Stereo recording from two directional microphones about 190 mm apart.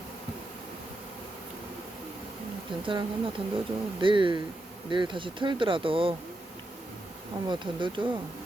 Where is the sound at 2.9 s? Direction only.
30° right (ahead or behind).